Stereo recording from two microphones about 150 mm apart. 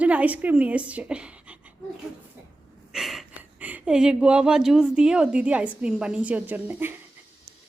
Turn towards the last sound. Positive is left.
turn(degrees=-15)  # may be behind; listen again after turning